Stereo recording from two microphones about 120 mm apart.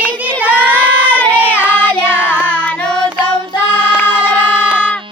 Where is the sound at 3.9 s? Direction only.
15° left (ahead or behind).